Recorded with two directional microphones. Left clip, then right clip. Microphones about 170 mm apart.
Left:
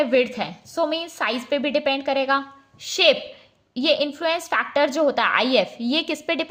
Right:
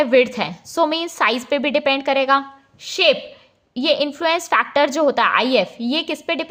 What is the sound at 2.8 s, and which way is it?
A woman's voice, 15° right (ahead or behind).